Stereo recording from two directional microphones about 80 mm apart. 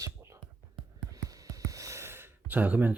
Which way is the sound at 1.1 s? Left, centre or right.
Right.